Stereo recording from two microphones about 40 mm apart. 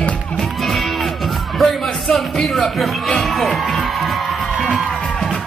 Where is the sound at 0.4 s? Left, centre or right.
Centre.